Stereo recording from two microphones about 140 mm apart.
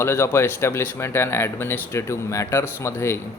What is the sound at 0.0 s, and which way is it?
Speech, 20° left (ahead or behind).